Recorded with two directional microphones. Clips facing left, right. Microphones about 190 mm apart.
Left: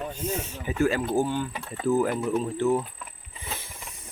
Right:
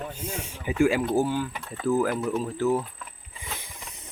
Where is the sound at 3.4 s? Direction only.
15° right (ahead or behind).